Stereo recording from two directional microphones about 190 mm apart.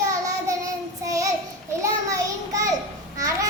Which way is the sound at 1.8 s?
15° right (ahead or behind).